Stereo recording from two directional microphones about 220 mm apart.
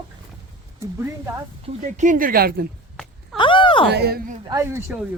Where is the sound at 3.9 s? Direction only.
45° right (ahead or behind).